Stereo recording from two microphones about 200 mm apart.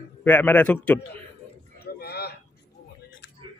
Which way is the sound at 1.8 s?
50° left (ahead or behind).